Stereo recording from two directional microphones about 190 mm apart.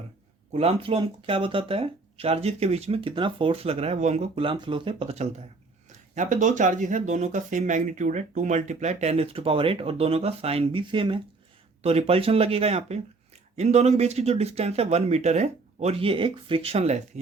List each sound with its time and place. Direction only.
0.5 s speech: 30° right (ahead or behind)